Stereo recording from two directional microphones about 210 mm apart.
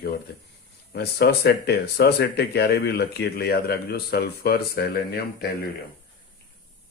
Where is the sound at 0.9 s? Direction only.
50° left (ahead or behind).